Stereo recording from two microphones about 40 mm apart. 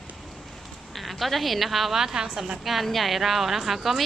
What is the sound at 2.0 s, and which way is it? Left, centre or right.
Speech, centre.